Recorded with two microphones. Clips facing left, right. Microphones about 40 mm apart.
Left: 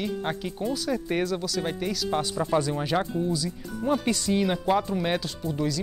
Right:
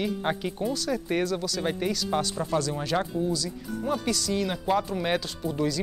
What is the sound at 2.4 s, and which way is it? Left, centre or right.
Speech, centre.